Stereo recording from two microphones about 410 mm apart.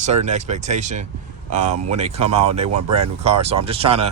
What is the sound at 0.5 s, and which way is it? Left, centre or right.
Speech, centre.